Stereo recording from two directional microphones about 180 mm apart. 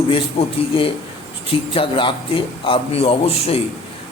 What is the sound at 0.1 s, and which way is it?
A man's voice, 30° left (ahead or behind).